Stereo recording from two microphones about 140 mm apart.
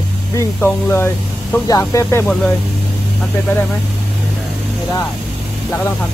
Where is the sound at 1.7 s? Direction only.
25° left (ahead or behind).